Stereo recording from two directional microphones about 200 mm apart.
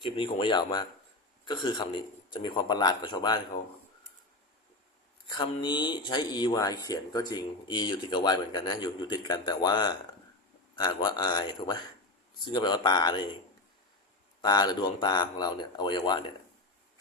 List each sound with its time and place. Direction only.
0.0 s speech: 25° left (ahead or behind)
5.4 s speech: 20° left (ahead or behind)
14.4 s speech: 20° left (ahead or behind)